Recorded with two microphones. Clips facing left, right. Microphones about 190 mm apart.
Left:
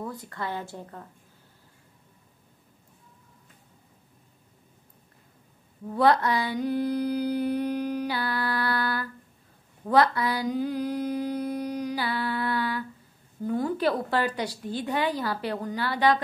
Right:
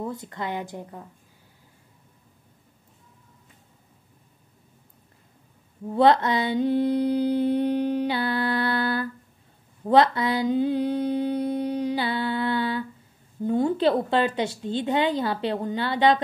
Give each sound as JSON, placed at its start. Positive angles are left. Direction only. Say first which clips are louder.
{"t": 0.0, "sound": "a woman's voice", "louder": "right 3 dB", "side_deg": -25}
{"t": 5.9, "sound": "a sound", "louder": "right 3 dB", "side_deg": -25}
{"t": 9.8, "sound": "mantra", "louder": "right 3 dB", "side_deg": -25}
{"t": 13.5, "sound": "a woman's voice", "louder": "right 4 dB", "side_deg": -25}